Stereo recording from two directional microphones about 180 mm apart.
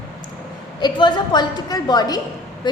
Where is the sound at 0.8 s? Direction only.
25° left (ahead or behind).